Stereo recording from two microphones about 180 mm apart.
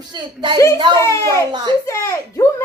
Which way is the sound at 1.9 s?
15° left (ahead or behind).